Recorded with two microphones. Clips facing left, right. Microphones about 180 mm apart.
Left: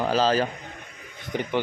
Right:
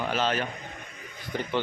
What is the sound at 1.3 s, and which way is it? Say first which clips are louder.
Speech: left 3 dB; 20° left (ahead or behind).